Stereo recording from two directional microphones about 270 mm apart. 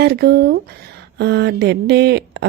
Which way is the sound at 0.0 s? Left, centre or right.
Right.